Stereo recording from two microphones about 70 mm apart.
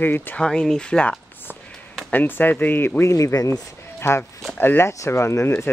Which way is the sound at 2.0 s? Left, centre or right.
Left.